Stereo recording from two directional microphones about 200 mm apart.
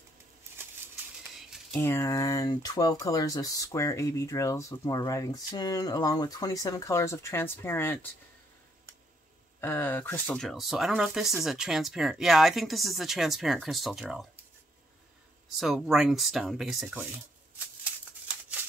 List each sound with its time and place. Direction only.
1.7 s speech: 10° left (ahead or behind)
9.6 s speech: 10° left (ahead or behind)
15.6 s speech: centre (ahead or behind)